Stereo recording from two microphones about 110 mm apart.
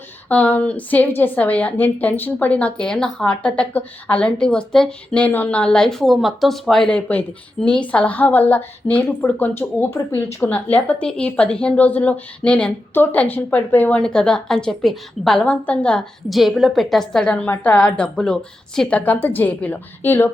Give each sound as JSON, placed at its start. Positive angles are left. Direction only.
{"t": 0.3, "sound": "a woman's voice", "side_deg": 15}